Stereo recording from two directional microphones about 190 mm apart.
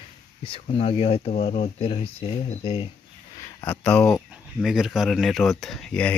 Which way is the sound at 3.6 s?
10° left (ahead or behind).